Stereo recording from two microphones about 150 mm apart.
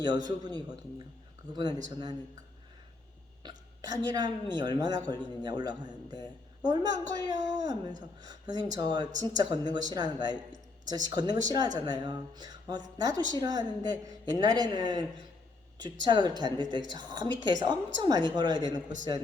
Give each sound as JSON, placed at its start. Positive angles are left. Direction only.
{"t": 0.0, "sound": "a man's voice", "side_deg": -30}
{"t": 3.4, "sound": "a sound", "side_deg": -30}
{"t": 3.8, "sound": "a man's voice", "side_deg": -25}